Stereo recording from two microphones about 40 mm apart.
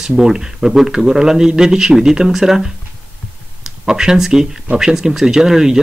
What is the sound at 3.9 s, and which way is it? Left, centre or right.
Speech, centre.